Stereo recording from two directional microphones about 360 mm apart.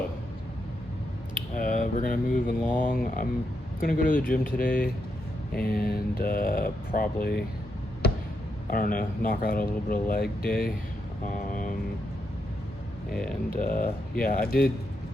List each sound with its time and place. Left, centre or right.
1.5 s speech: left
8.7 s speech: left
13.5 s speech: left